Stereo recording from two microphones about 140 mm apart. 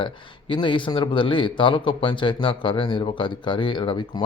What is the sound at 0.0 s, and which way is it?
Speech, 35° left (ahead or behind).